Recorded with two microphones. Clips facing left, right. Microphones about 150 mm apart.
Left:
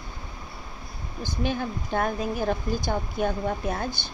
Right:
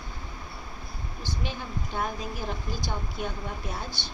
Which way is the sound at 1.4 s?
55° left (ahead or behind).